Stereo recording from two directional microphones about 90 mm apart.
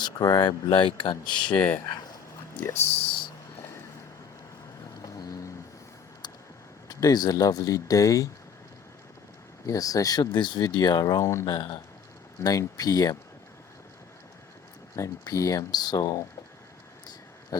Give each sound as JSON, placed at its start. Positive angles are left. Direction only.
{"t": 0.0, "sound": "speech", "side_deg": 50}
{"t": 1.5, "sound": "speech", "side_deg": 15}
{"t": 2.9, "sound": "a sound", "side_deg": 80}
{"t": 5.0, "sound": "vehicle", "side_deg": 35}
{"t": 6.8, "sound": "speech", "side_deg": 45}
{"t": 9.6, "sound": "speech", "side_deg": 40}
{"t": 11.4, "sound": "speech", "side_deg": 50}
{"t": 14.9, "sound": "speech", "side_deg": 40}
{"t": 17.5, "sound": "pig", "side_deg": 45}